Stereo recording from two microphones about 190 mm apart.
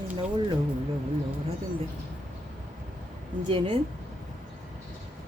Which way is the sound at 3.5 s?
25° right (ahead or behind).